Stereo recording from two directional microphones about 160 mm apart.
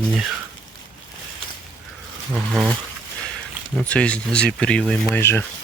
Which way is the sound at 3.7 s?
5° left (ahead or behind).